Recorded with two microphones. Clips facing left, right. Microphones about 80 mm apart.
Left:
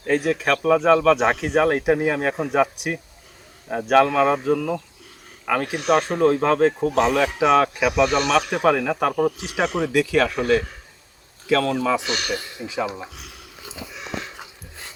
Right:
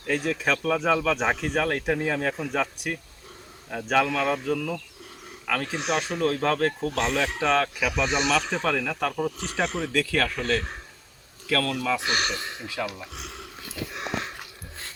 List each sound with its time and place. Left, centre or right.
0.0 s speech: centre
4.1 s speech: centre
5.8 s speech: centre
6.1 s speech: centre
12.4 s speech: right
12.6 s speech: left
13.6 s a sound: left
13.9 s dog: right
14.3 s dog: centre